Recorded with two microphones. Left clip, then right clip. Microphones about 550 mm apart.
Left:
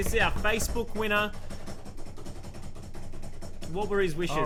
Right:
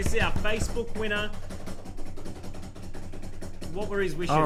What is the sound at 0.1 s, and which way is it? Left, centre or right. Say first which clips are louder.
Speech: left 2 dB; left.